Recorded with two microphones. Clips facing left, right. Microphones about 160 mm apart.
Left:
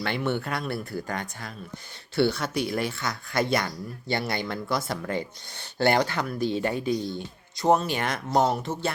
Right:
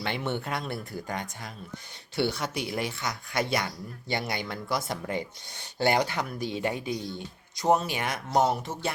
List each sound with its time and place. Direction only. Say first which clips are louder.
0.0 s speech: left 3 dB; 20° right (ahead or behind)